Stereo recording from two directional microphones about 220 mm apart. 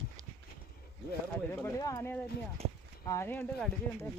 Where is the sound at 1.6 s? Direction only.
15° left (ahead or behind).